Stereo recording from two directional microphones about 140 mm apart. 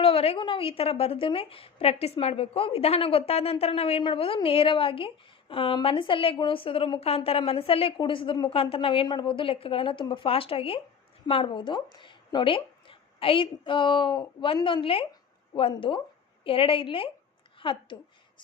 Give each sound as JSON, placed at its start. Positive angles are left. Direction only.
{"t": 0.0, "sound": "a woman's voice", "side_deg": 45}